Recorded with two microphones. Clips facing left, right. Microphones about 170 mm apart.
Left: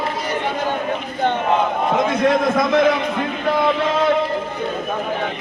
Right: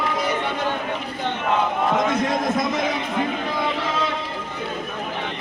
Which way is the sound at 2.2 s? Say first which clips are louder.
Left 5 dB; 60° left (ahead or behind).